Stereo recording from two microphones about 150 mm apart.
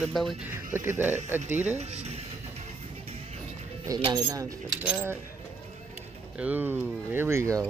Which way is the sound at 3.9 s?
25° right (ahead or behind).